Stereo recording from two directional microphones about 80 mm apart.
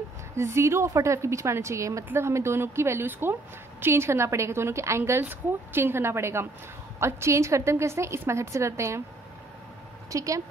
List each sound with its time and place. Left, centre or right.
0.4 s a woman's voice: right
10.1 s speech: right